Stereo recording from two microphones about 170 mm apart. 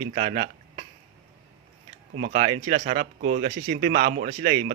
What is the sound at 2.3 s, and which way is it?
Speech, 45° right (ahead or behind).